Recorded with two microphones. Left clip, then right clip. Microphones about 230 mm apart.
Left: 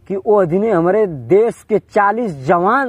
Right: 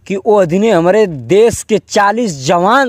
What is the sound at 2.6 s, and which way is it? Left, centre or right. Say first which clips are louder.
Speech: right 6 dB; right.